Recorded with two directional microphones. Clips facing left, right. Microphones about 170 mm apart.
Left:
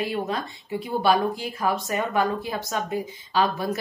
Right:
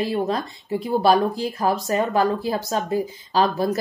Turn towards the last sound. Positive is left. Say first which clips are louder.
# right 4 dB
turn(degrees=-35)  # may be behind; listen again after turning